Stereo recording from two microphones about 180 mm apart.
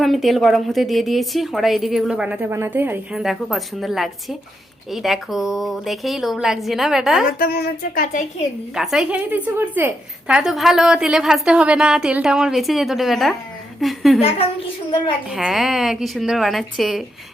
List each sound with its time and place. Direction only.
0.0 s a woman's voice: centre (ahead or behind)
7.3 s speech: 55° left (ahead or behind)
8.7 s a woman's voice: centre (ahead or behind)
15.3 s a woman's voice: centre (ahead or behind)